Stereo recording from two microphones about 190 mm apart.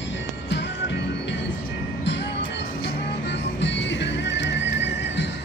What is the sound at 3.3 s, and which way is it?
Music, 65° left (ahead or behind).